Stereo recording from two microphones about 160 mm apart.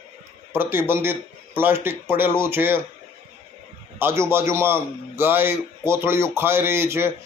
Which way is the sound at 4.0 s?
15° right (ahead or behind).